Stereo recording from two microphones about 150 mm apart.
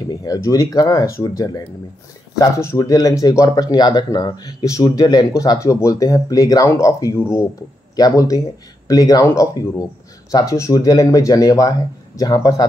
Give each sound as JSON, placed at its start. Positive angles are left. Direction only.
{"t": 0.1, "sound": "speech", "side_deg": 25}